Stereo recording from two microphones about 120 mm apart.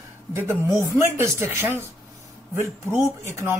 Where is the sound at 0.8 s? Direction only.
20° right (ahead or behind).